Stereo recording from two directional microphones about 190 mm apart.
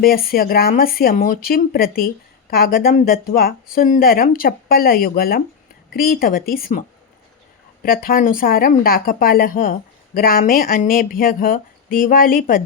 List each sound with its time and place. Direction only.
0.0 s speech: 50° left (ahead or behind)